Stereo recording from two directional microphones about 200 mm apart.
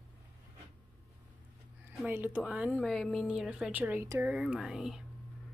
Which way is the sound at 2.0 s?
10° right (ahead or behind).